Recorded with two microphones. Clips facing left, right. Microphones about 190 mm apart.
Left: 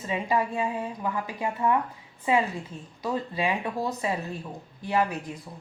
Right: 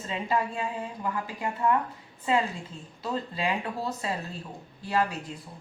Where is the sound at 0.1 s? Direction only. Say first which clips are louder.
Left 2 dB; 15° left (ahead or behind).